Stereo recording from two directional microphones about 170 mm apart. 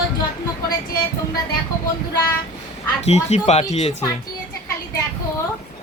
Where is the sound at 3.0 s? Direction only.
40° left (ahead or behind).